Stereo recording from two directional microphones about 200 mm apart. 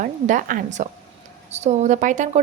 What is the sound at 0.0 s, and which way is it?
A woman's voice, 40° right (ahead or behind).